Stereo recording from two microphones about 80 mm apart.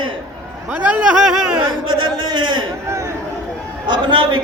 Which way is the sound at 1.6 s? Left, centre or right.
Right.